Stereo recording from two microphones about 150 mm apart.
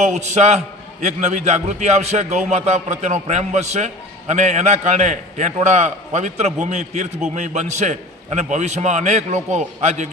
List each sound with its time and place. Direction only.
0.0 s a man's voice: 50° right (ahead or behind)